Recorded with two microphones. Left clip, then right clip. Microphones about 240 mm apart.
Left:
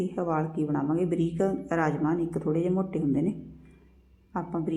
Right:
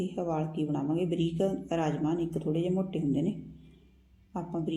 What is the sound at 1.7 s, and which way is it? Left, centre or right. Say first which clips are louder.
Speech: left 4 dB; centre.